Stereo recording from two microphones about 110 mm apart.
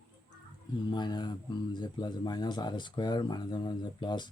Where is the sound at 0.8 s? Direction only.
40° left (ahead or behind).